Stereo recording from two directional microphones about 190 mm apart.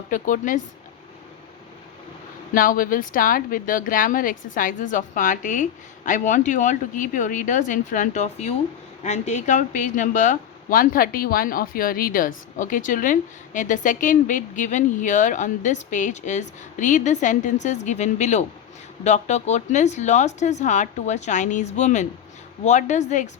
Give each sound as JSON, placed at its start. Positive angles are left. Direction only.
{"t": 0.1, "sound": "a woman's voice", "side_deg": 45}
{"t": 2.5, "sound": "a woman's voice", "side_deg": 45}